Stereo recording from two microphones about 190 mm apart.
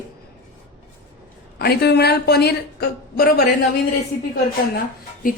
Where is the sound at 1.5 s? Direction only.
55° left (ahead or behind).